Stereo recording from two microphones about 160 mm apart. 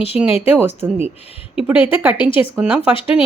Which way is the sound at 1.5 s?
10° right (ahead or behind).